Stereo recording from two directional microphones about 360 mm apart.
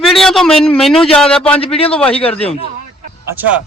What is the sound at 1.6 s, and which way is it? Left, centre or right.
Speech, centre.